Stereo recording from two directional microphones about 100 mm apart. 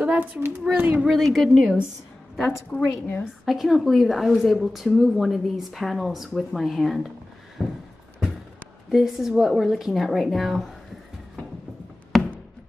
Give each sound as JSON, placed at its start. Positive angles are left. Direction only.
{"t": 0.0, "sound": "speech", "side_deg": -10}
{"t": 1.0, "sound": "speech", "side_deg": 0}
{"t": 2.8, "sound": "a woman's voice", "side_deg": 20}
{"t": 3.4, "sound": "speech", "side_deg": 0}
{"t": 7.6, "sound": "a sound", "side_deg": 0}
{"t": 8.9, "sound": "speech", "side_deg": 0}
{"t": 12.1, "sound": "a sound", "side_deg": 0}